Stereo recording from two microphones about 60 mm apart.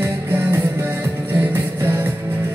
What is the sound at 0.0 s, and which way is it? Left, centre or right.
Music, right.